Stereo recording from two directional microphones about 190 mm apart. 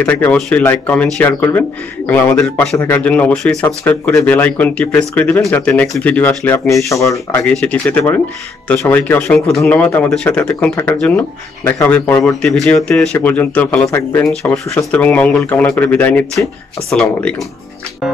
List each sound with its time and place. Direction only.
0.0 s speech: 5° left (ahead or behind)
7.4 s speech: 5° left (ahead or behind)
14.4 s speech: centre (ahead or behind)